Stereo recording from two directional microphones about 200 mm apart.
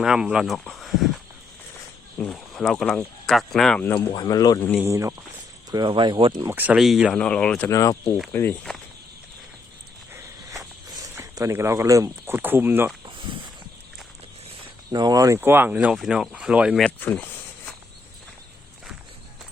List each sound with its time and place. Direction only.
0.0 s speech: 5° right (ahead or behind)
2.2 s speech: centre (ahead or behind)
3.9 s speech: 20° left (ahead or behind)
4.8 s speech: 15° right (ahead or behind)
6.4 s speech: 10° right (ahead or behind); by 7.7 s 5° left (ahead or behind)
7.7 s speech: 15° left (ahead or behind)
10.1 s walk: 15° right (ahead or behind)
10.9 s speech: 15° right (ahead or behind)
13.1 s a sound: 25° right (ahead or behind)
14.8 s speech: 20° right (ahead or behind); by 17.2 s 5° left (ahead or behind)